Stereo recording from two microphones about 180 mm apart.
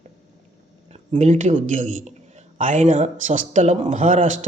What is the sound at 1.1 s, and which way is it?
A man's voice, 40° right (ahead or behind).